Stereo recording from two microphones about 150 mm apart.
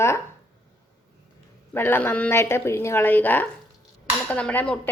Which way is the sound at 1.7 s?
15° left (ahead or behind).